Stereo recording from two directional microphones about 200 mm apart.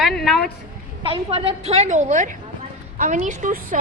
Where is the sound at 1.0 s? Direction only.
25° right (ahead or behind).